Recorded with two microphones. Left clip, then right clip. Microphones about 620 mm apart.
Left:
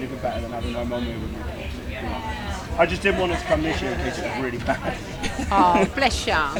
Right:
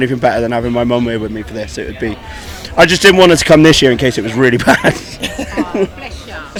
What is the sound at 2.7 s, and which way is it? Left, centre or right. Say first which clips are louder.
Speech: right 13 dB; right.